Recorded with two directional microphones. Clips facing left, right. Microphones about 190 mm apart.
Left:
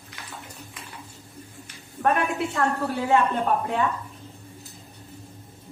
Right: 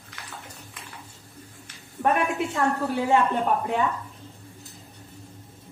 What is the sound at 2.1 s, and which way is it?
Speech, 15° right (ahead or behind).